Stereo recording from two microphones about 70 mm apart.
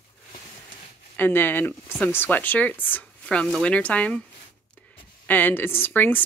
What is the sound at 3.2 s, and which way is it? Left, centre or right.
Speech, centre.